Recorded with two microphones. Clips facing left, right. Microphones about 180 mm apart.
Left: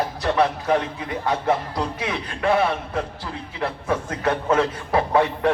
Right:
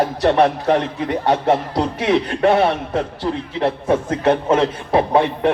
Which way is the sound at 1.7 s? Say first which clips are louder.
Right 9 dB; 65° right (ahead or behind).